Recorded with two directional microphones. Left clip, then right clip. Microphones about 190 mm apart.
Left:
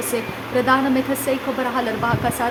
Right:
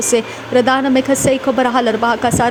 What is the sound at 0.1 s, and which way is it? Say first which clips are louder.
A woman's voice: right 10 dB; 35° right (ahead or behind).